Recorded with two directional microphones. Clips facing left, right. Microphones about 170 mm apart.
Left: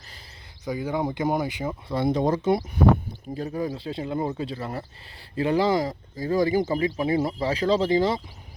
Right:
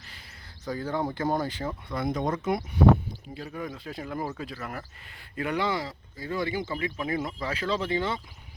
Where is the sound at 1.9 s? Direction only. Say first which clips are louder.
Left 6 dB; 30° left (ahead or behind).